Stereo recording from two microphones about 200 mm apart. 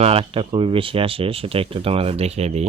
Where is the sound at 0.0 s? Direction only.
30° right (ahead or behind).